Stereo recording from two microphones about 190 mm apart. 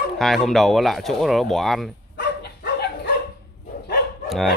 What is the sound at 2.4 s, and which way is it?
Dog, 60° left (ahead or behind).